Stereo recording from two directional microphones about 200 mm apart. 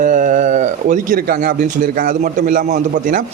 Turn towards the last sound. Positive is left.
turn(degrees=-40)  # may be behind; listen again after turning